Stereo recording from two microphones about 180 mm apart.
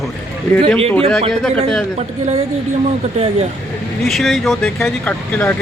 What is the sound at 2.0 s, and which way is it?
Speech, 40° right (ahead or behind).